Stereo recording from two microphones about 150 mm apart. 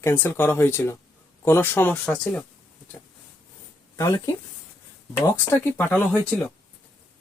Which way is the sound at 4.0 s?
20° left (ahead or behind).